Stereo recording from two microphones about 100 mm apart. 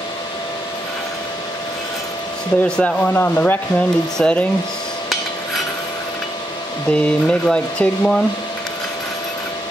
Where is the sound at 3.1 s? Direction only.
20° left (ahead or behind).